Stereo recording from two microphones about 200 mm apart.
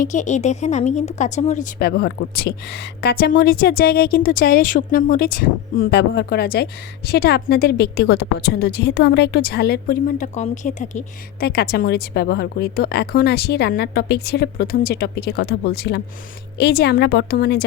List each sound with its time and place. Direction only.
0.0 s a woman's voice: 40° left (ahead or behind)
1.8 s speech: 50° left (ahead or behind)
10.3 s a woman's voice: 35° left (ahead or behind)
11.4 s speech: 50° left (ahead or behind)